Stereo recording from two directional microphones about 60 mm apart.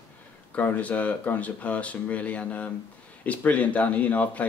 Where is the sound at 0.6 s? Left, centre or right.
Left.